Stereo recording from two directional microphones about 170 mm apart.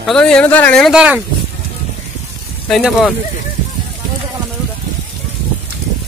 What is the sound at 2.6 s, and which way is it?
Speech, centre (ahead or behind).